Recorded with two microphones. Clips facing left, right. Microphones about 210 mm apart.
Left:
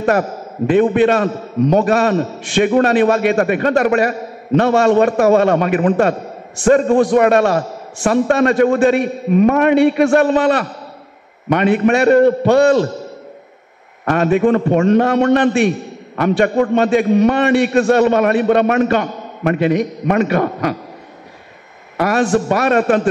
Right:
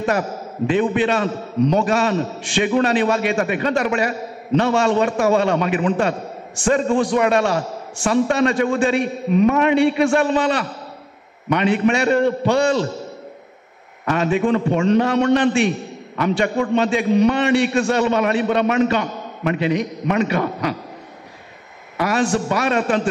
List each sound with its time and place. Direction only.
0.7 s a man's voice: 50° left (ahead or behind)
14.0 s a man's voice: 50° left (ahead or behind)
21.9 s a man's voice: 45° left (ahead or behind)